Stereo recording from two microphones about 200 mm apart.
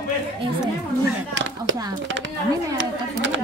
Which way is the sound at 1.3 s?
65° right (ahead or behind).